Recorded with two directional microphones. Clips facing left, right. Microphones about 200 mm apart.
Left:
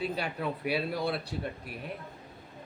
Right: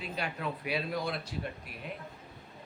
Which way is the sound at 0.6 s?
30° left (ahead or behind).